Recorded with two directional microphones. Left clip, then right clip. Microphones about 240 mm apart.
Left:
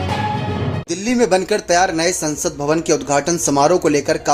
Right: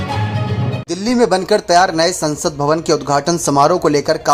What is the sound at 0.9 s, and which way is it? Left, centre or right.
Speech, centre.